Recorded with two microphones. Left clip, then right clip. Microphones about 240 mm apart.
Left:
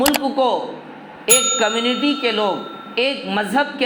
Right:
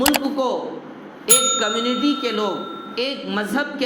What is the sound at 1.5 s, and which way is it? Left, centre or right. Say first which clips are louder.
Speech: left 3 dB; left.